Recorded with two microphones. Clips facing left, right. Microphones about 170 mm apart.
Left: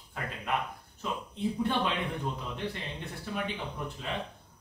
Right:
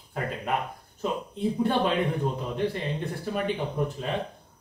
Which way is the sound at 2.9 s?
45° right (ahead or behind).